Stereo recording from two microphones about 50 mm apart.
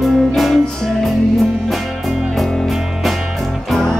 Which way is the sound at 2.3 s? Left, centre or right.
Centre.